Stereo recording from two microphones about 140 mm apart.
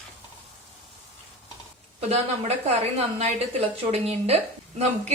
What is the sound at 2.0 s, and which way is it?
Speech, 50° right (ahead or behind).